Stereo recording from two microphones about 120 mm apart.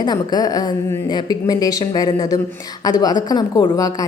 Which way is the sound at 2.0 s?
45° left (ahead or behind).